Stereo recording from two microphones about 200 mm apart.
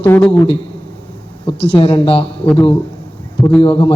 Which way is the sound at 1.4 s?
25° left (ahead or behind).